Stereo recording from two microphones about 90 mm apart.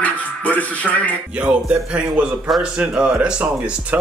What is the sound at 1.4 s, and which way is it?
Speech, 15° right (ahead or behind).